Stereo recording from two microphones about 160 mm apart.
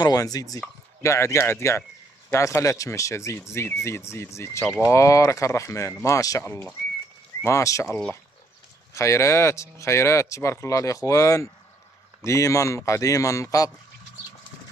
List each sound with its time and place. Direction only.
0.0 s speech: 20° left (ahead or behind)